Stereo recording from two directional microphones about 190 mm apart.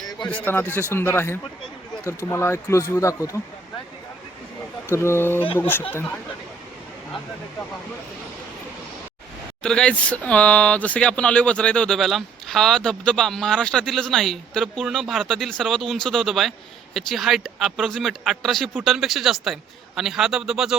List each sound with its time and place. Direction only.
0.3 s a man's voice: 10° left (ahead or behind)
4.9 s a man's voice: 15° left (ahead or behind)
9.6 s speech: 5° left (ahead or behind)